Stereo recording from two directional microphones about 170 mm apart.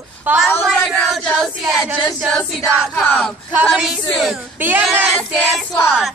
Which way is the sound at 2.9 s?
15° left (ahead or behind).